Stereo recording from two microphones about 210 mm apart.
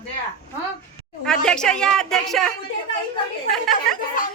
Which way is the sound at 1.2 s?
5° left (ahead or behind).